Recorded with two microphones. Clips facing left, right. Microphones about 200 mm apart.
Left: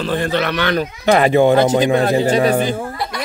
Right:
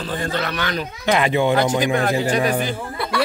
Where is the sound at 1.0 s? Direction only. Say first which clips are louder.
Left 6 dB; 45° left (ahead or behind).